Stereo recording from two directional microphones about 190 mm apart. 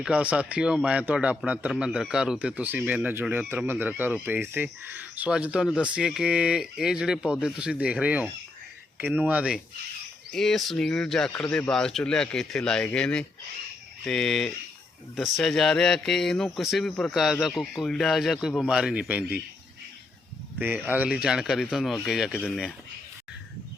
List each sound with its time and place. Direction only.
0.0 s speech: 5° right (ahead or behind)
20.6 s speech: 10° right (ahead or behind)